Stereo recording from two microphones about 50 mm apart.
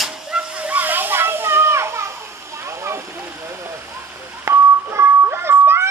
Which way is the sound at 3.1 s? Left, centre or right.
Right.